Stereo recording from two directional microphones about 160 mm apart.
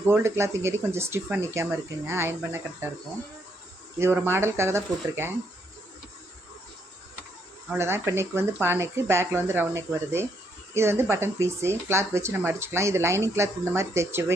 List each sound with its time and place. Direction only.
0.1 s speech: 15° right (ahead or behind)
3.9 s speech: 15° right (ahead or behind)
7.7 s speech: 15° right (ahead or behind)